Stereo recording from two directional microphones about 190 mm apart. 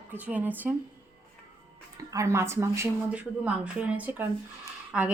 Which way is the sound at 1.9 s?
15° right (ahead or behind).